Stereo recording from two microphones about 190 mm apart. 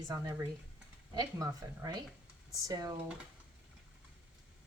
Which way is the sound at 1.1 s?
20° right (ahead or behind).